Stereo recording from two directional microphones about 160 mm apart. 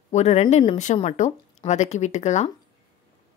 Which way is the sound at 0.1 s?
45° left (ahead or behind).